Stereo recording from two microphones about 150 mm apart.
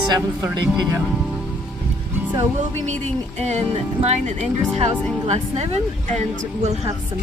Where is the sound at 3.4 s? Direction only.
50° right (ahead or behind).